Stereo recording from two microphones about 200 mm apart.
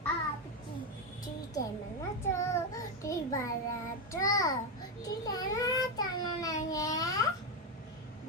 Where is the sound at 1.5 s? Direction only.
15° left (ahead or behind).